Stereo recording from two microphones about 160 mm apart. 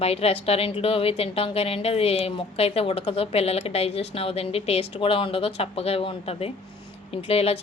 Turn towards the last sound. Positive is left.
turn(degrees=40)  # may be behind; listen again after turning